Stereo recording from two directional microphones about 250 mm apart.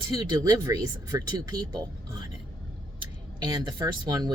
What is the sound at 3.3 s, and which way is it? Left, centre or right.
Speech, centre.